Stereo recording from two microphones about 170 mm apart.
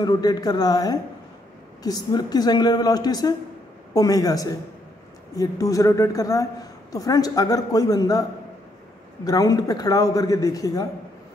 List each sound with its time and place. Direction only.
0.0 s a man's voice: 25° left (ahead or behind)